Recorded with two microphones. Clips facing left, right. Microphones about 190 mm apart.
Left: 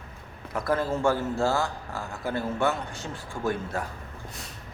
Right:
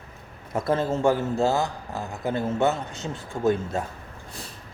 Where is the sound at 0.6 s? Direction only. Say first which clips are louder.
Right 3 dB; 25° right (ahead or behind).